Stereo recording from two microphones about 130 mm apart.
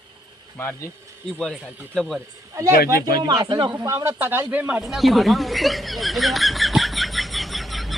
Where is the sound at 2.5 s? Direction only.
25° right (ahead or behind).